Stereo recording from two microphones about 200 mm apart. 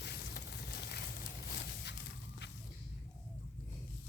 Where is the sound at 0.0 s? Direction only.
55° left (ahead or behind).